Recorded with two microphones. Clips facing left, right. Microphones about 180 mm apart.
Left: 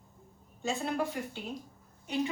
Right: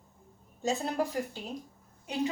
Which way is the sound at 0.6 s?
40° right (ahead or behind).